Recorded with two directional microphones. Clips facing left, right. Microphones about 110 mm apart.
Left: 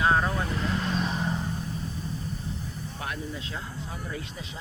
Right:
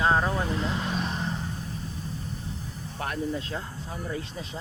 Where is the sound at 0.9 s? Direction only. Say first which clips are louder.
Left 1 dB; centre (ahead or behind).